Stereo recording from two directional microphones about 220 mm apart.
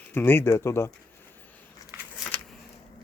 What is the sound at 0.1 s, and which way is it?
Speech, 10° left (ahead or behind).